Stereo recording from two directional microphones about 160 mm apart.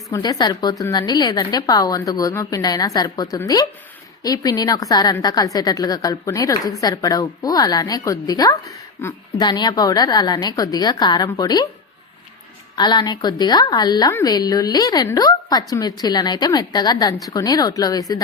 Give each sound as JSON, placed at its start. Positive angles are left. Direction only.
{"t": 0.1, "sound": "a woman's voice", "side_deg": 25}
{"t": 9.4, "sound": "a woman's voice", "side_deg": 25}
{"t": 12.7, "sound": "a woman's voice", "side_deg": 25}